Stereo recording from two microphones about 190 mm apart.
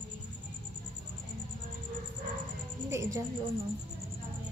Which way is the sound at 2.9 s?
15° right (ahead or behind).